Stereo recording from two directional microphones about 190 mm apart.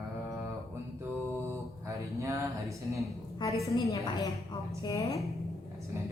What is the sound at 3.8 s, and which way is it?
A woman's voice, 15° left (ahead or behind).